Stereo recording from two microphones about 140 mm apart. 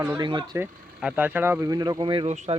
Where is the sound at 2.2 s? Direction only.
50° right (ahead or behind).